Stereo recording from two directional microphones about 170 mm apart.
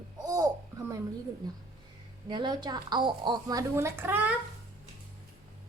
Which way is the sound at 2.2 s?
25° right (ahead or behind).